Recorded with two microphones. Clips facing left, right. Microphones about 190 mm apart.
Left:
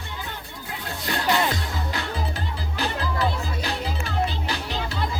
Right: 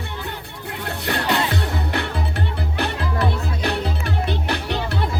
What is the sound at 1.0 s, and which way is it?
Music, 65° right (ahead or behind).